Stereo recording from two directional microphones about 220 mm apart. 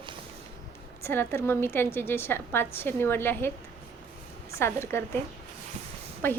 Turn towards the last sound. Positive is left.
turn(degrees=10)  # may be behind; listen again after turning